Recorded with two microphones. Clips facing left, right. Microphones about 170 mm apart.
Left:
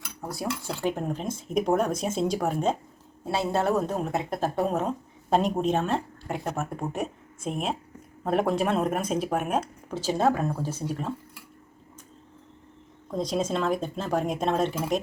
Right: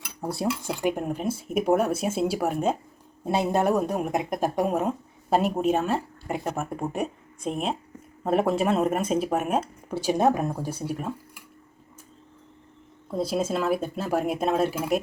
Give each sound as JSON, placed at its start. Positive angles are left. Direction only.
{"t": 0.2, "sound": "speech", "side_deg": -30}
{"t": 0.7, "sound": "a woman's voice", "side_deg": -15}
{"t": 13.1, "sound": "speech", "side_deg": -5}